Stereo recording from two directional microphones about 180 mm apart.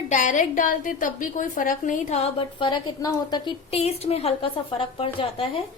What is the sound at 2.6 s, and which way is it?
A woman's voice, 25° left (ahead or behind).